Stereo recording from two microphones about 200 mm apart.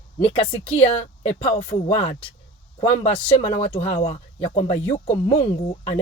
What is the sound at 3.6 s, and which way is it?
Speech, 30° left (ahead or behind).